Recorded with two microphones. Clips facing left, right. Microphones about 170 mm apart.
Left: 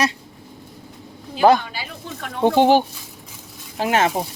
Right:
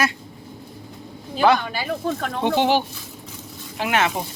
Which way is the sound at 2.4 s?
45° left (ahead or behind).